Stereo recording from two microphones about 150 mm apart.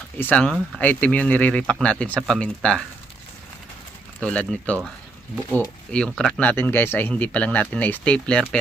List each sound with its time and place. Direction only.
0.2 s speech: 10° left (ahead or behind)
4.2 s speech: 10° left (ahead or behind)